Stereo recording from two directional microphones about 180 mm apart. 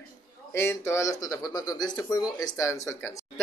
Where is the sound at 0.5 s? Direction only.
15° left (ahead or behind).